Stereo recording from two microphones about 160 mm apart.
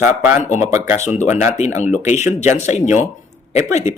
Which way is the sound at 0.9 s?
45° left (ahead or behind).